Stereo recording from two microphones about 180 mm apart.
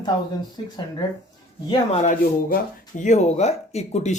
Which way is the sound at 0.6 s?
25° left (ahead or behind).